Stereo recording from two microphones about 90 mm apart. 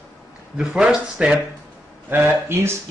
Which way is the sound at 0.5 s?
10° right (ahead or behind).